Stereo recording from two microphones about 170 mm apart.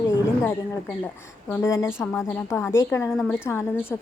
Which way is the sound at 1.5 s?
20° left (ahead or behind).